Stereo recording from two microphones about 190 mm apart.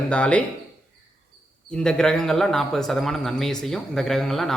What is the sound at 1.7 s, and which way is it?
A man's voice, 5° left (ahead or behind).